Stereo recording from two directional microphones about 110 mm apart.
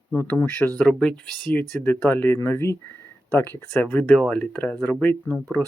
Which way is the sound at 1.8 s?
15° left (ahead or behind).